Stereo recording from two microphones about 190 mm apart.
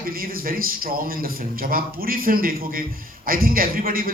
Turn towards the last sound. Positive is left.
turn(degrees=-50)  # may be behind; listen again after turning